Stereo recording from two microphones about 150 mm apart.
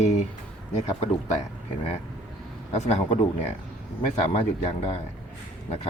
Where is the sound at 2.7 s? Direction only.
50° left (ahead or behind).